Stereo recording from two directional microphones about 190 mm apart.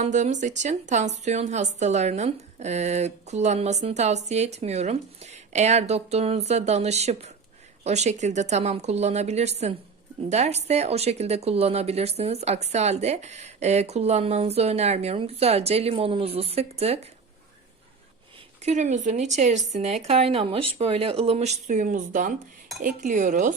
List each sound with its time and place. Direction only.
0.0 s speech: 40° right (ahead or behind)
18.6 s speech: 40° right (ahead or behind)